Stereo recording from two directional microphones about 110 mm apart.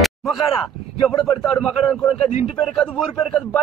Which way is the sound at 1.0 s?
Centre (ahead or behind).